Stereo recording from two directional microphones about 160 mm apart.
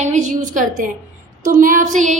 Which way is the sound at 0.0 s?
50° right (ahead or behind).